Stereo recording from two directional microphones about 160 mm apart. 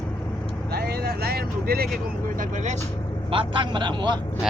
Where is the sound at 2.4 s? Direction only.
50° right (ahead or behind).